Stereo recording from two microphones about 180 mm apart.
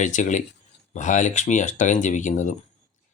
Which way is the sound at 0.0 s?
45° left (ahead or behind).